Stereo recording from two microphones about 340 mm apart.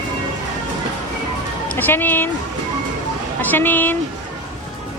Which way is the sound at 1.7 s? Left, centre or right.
Centre.